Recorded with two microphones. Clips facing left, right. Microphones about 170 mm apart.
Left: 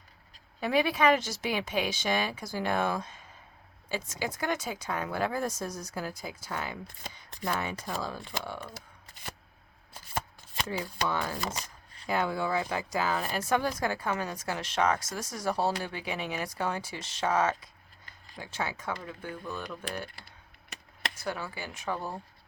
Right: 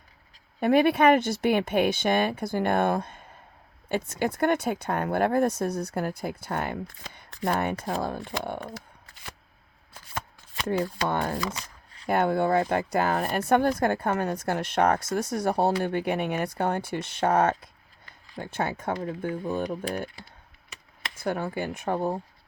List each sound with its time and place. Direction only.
0.6 s speech: 55° right (ahead or behind)
10.7 s speech: 55° right (ahead or behind)